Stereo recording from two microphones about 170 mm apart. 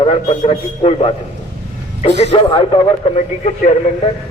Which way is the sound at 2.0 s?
90° right.